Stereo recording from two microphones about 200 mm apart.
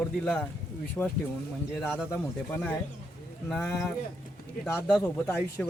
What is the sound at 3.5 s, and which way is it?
Speech, 5° left (ahead or behind).